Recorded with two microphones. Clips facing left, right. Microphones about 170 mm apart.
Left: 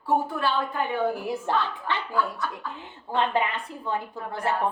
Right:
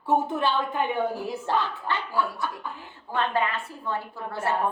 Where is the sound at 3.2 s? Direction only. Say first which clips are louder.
Left 1 dB; 15° left (ahead or behind).